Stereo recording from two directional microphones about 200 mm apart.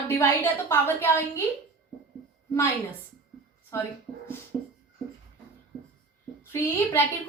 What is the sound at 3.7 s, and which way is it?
Speech, 15° left (ahead or behind).